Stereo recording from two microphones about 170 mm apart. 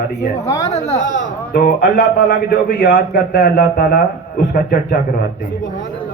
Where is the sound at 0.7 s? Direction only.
40° left (ahead or behind).